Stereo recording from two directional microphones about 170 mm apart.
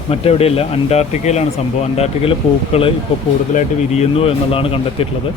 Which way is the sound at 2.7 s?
35° left (ahead or behind).